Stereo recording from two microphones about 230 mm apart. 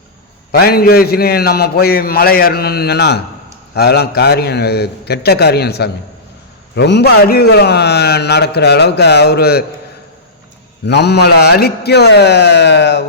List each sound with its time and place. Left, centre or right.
0.5 s a man's voice: left
10.8 s a man's voice: left